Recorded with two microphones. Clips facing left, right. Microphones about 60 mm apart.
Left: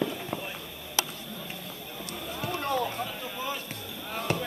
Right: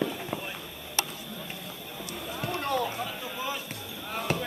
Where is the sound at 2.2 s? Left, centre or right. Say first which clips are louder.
Even; centre.